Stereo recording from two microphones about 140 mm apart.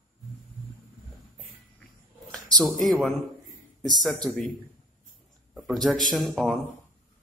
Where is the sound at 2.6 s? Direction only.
Centre (ahead or behind).